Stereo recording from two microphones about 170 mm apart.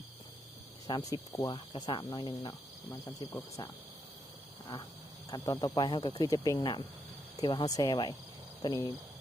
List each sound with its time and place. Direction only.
0.9 s speech: 20° left (ahead or behind)
5.3 s speech: 20° left (ahead or behind)